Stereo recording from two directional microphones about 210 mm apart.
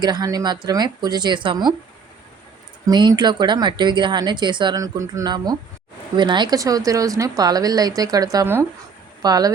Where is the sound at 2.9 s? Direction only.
20° right (ahead or behind).